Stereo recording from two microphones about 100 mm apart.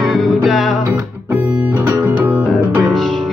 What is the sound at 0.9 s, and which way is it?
Music, 15° right (ahead or behind).